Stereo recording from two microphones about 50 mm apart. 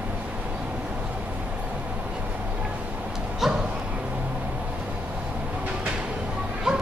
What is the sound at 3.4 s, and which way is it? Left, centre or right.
Bow-wow, centre.